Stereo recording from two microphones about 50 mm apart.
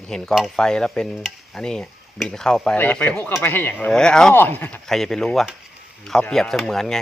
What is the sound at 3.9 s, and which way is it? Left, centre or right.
Speech, centre.